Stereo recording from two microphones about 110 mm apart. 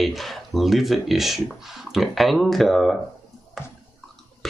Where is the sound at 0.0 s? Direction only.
Centre (ahead or behind).